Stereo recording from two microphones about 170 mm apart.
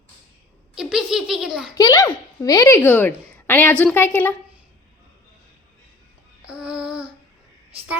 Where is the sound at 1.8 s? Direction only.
20° left (ahead or behind).